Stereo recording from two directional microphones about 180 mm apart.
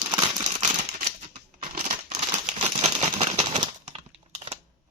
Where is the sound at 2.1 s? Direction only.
40° right (ahead or behind).